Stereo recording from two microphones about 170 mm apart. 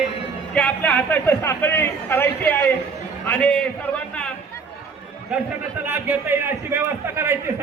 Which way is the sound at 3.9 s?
5° left (ahead or behind).